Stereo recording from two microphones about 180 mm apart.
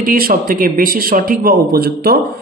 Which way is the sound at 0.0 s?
50° right (ahead or behind).